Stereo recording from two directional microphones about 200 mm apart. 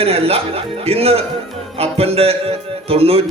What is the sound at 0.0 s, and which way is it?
A man's voice, 30° right (ahead or behind).